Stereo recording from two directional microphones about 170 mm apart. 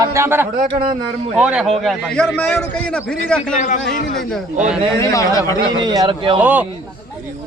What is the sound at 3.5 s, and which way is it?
Speech, 45° left (ahead or behind).